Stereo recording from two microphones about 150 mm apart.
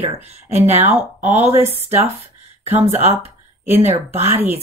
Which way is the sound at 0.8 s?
15° right (ahead or behind).